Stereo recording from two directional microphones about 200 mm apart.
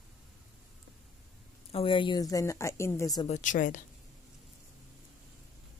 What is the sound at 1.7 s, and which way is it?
Speech, 25° left (ahead or behind).